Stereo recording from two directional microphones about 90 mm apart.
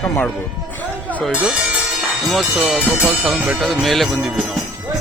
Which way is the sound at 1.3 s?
15° right (ahead or behind).